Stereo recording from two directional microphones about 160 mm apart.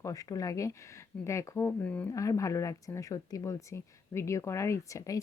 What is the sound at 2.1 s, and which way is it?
A woman's voice, 20° left (ahead or behind).